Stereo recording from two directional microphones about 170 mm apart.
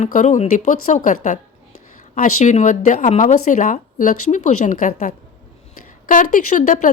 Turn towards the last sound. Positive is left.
turn(degrees=50)  # may be behind; listen again after turning